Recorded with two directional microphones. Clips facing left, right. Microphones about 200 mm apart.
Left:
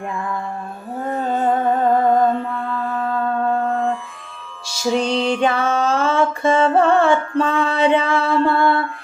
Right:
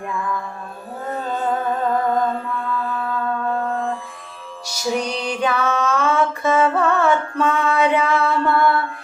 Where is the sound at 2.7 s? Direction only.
40° left (ahead or behind).